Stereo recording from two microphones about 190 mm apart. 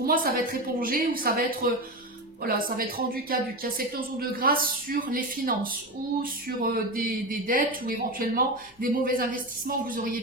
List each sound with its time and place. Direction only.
0.0 s speech: 50° right (ahead or behind)